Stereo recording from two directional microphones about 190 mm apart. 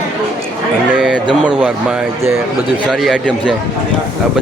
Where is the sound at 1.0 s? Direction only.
5° right (ahead or behind).